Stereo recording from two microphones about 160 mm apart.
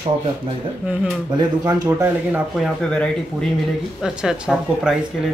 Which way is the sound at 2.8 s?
5° left (ahead or behind).